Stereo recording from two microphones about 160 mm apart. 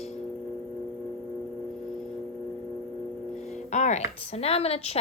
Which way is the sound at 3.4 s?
50° left (ahead or behind).